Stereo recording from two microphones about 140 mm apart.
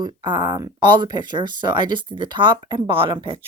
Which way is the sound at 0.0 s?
35° right (ahead or behind).